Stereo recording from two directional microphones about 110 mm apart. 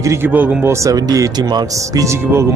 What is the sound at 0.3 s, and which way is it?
Speech, 15° right (ahead or behind).